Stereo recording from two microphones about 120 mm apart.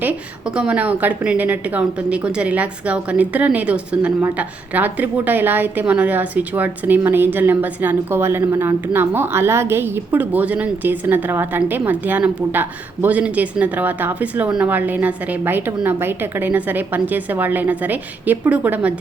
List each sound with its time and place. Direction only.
0.0 s a woman's voice: 10° right (ahead or behind)